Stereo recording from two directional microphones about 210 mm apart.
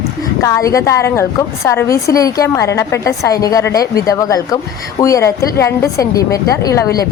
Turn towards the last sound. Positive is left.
turn(degrees=15)  # may be behind; listen again after turning